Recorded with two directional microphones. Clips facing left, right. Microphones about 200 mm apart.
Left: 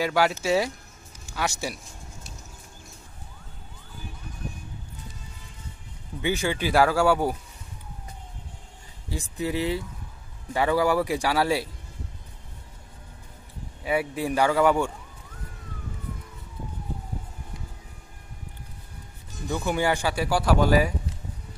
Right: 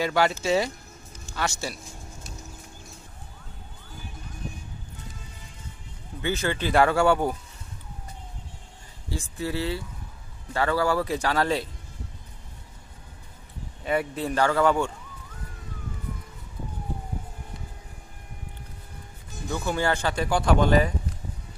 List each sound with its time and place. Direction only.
0.0 s a man's voice: 5° left (ahead or behind)
6.2 s speech: 15° left (ahead or behind)
9.1 s speech: 15° left (ahead or behind)
13.8 s speech: 10° left (ahead or behind)
19.5 s speech: 15° left (ahead or behind)